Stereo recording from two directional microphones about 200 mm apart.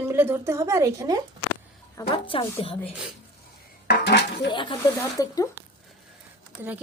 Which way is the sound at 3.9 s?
60° left (ahead or behind).